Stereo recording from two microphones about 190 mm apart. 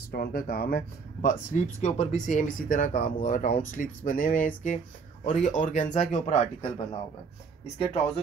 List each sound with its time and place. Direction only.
0.1 s speech: 50° left (ahead or behind); by 7.0 s 35° left (ahead or behind)